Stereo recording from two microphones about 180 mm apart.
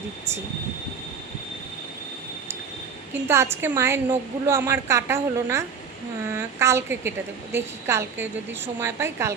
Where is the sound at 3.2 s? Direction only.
15° right (ahead or behind).